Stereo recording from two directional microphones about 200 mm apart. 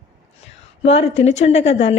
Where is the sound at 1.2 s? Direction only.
30° left (ahead or behind).